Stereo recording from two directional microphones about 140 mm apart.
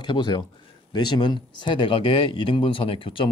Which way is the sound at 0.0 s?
35° left (ahead or behind).